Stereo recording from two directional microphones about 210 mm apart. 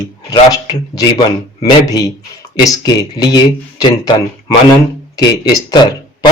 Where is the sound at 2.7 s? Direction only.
20° left (ahead or behind).